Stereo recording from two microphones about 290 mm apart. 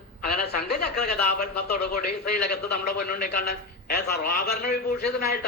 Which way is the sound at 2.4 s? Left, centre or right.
Left.